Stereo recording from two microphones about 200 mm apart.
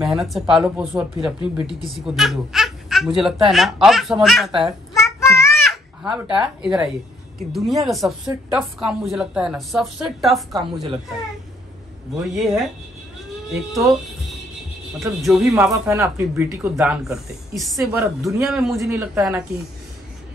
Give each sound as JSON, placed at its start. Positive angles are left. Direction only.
{"t": 0.0, "sound": "a woman's voice", "side_deg": 0}
{"t": 4.5, "sound": "a woman's voice", "side_deg": -25}
{"t": 4.9, "sound": "child singing", "side_deg": 15}
{"t": 5.7, "sound": "a sound", "side_deg": -5}
{"t": 6.6, "sound": "a woman's voice", "side_deg": -5}
{"t": 10.5, "sound": "a woman's voice", "side_deg": -25}
{"t": 12.4, "sound": "a woman's voice", "side_deg": 0}
{"t": 15.0, "sound": "a woman's voice", "side_deg": 0}
{"t": 18.8, "sound": "speech", "side_deg": -15}